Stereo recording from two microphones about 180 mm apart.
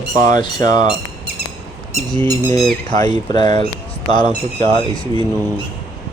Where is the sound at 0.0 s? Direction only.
50° right (ahead or behind).